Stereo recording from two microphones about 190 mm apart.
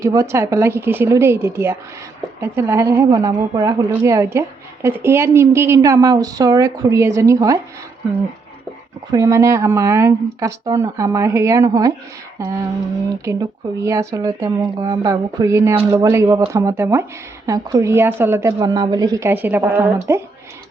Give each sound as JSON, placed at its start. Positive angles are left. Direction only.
{"t": 0.0, "sound": "speech", "side_deg": -15}
{"t": 9.1, "sound": "speech", "side_deg": -15}
{"t": 13.2, "sound": "speech", "side_deg": -15}